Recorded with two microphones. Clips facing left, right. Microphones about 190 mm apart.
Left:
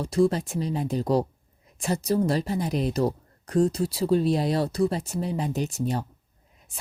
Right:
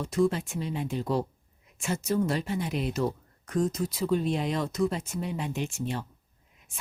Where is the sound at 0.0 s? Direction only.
35° left (ahead or behind).